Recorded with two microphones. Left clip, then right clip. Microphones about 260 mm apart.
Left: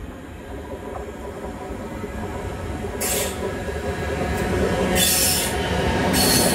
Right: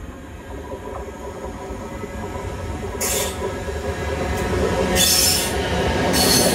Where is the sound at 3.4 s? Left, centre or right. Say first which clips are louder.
Right 1 dB; right.